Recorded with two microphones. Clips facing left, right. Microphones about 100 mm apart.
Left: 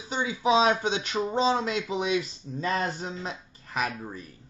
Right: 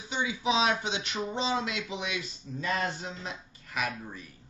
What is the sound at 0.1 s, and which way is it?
Speech, 45° left (ahead or behind).